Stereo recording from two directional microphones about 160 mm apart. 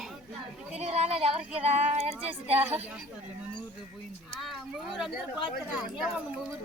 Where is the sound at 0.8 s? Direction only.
40° right (ahead or behind).